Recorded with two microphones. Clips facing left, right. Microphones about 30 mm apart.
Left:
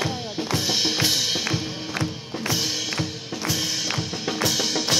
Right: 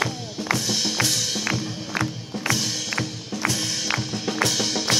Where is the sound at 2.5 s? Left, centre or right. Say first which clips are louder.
Right 1 dB; centre.